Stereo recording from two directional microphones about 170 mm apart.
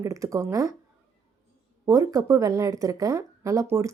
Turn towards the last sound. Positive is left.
turn(degrees=-20)  # may be behind; listen again after turning